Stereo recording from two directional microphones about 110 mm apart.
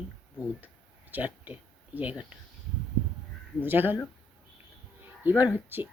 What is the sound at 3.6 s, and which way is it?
Speech, 20° right (ahead or behind).